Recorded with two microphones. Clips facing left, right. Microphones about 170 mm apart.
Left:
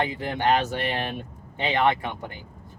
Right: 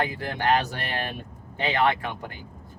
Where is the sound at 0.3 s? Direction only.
20° left (ahead or behind).